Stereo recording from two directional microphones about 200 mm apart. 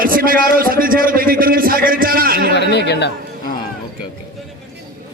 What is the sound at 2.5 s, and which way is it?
Speech, 60° left (ahead or behind).